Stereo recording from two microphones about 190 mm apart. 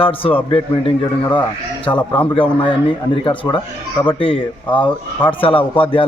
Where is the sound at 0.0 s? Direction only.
30° left (ahead or behind).